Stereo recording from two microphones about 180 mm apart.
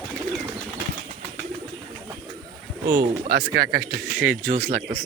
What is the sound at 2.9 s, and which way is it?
Speech, 55° right (ahead or behind).